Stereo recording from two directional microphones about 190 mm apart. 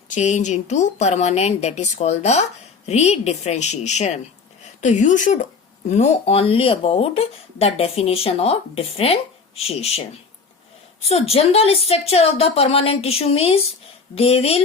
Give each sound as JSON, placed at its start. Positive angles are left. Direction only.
{"t": 0.1, "sound": "a woman's voice", "side_deg": 40}
{"t": 11.1, "sound": "a woman's voice", "side_deg": 30}